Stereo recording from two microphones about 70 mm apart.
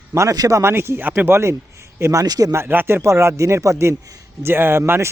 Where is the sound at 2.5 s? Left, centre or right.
Right.